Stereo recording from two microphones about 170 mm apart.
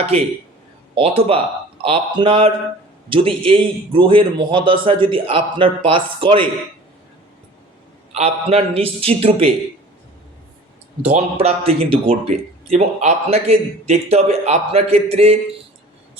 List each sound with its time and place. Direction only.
0.0 s speech: 35° right (ahead or behind)
8.1 s speech: 35° right (ahead or behind)
11.1 s speech: 35° right (ahead or behind)